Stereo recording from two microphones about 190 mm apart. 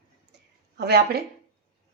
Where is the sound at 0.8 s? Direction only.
55° right (ahead or behind).